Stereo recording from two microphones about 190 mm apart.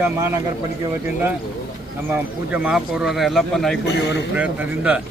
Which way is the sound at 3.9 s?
65° left (ahead or behind).